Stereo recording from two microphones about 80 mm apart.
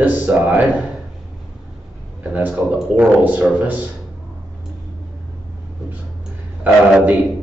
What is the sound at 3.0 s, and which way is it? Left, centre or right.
Speech, centre.